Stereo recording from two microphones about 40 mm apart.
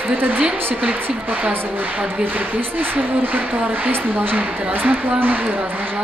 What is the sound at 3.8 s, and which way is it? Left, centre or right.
Speech, right.